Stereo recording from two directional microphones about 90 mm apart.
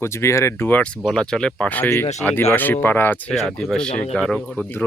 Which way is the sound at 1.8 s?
30° left (ahead or behind).